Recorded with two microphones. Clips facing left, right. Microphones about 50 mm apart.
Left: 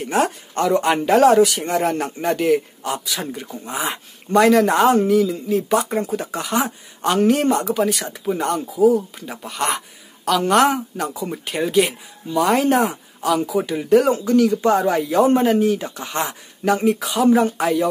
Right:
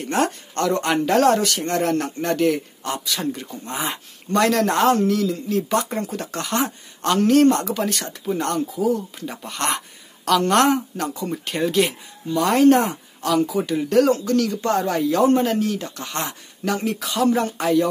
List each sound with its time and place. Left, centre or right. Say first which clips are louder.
0.0 s speech: left 2 dB; centre